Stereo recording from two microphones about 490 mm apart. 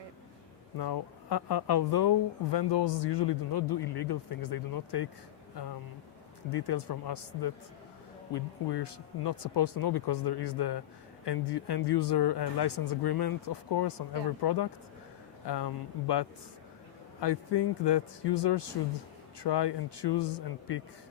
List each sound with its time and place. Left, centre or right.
0.8 s speech: left
6.5 s speech: left